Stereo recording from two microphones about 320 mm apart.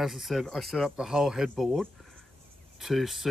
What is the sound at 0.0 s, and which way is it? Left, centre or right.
Speech, centre.